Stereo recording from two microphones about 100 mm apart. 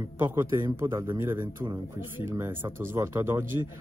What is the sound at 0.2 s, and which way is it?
Speech, 20° right (ahead or behind).